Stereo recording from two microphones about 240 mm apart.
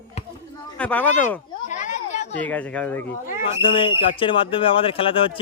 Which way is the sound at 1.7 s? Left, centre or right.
Left.